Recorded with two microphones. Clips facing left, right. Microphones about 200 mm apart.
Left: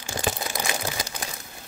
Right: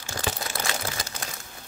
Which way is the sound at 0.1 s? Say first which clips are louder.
Left 3 dB; 15° left (ahead or behind).